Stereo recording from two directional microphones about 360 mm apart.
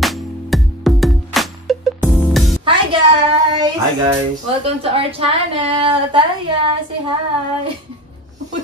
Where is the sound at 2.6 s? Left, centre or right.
Centre.